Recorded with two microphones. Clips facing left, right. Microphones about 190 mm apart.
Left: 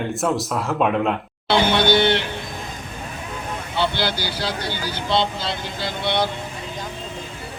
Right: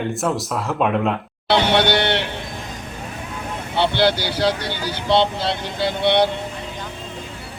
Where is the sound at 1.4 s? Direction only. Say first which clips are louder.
Right 1 dB; 65° right (ahead or behind).